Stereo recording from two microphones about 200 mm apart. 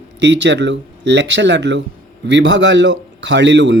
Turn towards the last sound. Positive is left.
turn(degrees=-60)  # may be behind; listen again after turning